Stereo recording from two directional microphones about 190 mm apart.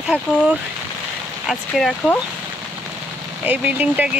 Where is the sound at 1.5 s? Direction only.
Centre (ahead or behind).